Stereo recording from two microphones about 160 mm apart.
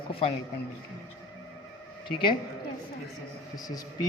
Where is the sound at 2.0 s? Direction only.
30° left (ahead or behind).